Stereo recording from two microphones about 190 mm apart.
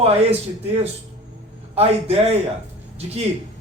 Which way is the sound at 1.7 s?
30° right (ahead or behind).